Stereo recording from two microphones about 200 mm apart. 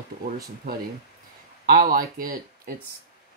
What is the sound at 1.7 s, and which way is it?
Speech, 45° right (ahead or behind).